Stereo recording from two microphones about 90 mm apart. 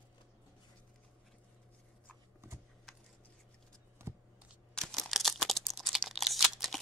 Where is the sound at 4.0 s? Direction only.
30° right (ahead or behind).